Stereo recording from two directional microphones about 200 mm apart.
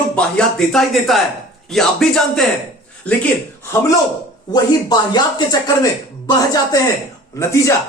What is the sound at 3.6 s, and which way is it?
Speech, 15° left (ahead or behind).